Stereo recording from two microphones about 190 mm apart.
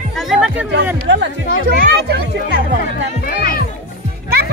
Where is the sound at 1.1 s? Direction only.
80° right.